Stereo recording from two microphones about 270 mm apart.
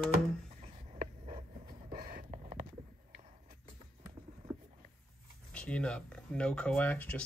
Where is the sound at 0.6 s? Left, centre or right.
Right.